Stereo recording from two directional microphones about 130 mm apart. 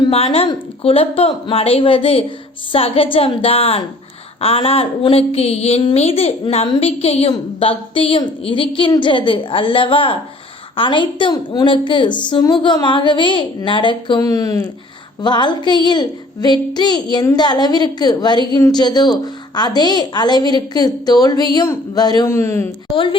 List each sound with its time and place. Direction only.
0.1 s a sound: 50° left (ahead or behind)
9.0 s a woman's voice: 40° left (ahead or behind)
14.2 s speech: 25° left (ahead or behind)
15.2 s a woman's voice: 35° left (ahead or behind)
22.3 s speech: 20° left (ahead or behind)